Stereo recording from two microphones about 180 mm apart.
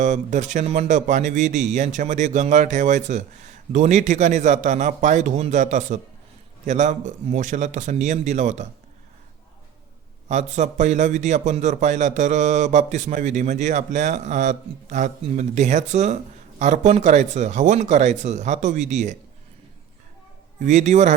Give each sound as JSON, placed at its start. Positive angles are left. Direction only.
{"t": 0.0, "sound": "a man's voice", "side_deg": -40}
{"t": 10.2, "sound": "a man's voice", "side_deg": -40}
{"t": 20.6, "sound": "a man's voice", "side_deg": -40}